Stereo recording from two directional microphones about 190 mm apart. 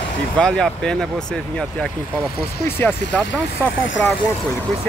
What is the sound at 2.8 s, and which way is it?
Speech, 10° left (ahead or behind).